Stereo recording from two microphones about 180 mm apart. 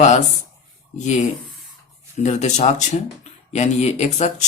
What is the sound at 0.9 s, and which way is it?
Speech, 40° left (ahead or behind).